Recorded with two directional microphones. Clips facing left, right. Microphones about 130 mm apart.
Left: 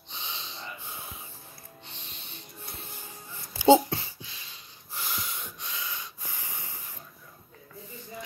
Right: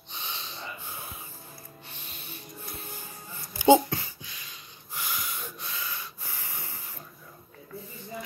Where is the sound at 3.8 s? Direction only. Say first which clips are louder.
Even; 30° left (ahead or behind).